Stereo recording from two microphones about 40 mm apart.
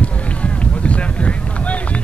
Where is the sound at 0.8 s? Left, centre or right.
Left.